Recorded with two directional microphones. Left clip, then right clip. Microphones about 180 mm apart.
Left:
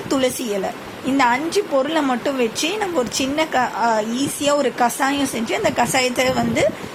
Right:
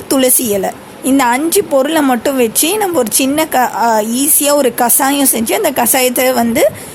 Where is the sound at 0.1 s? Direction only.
50° right (ahead or behind).